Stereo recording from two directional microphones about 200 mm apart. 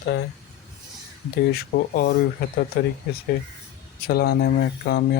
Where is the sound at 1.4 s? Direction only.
50° left (ahead or behind).